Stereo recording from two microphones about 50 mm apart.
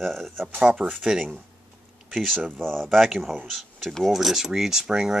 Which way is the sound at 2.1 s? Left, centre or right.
Centre.